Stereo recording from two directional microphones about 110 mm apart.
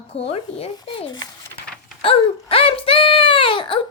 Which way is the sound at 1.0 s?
40° left (ahead or behind).